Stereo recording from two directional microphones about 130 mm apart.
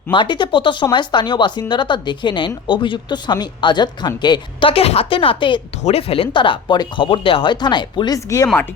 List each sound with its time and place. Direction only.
0.1 s speech: 40° left (ahead or behind)
5.8 s speech: 50° left (ahead or behind); by 8.4 s 30° left (ahead or behind)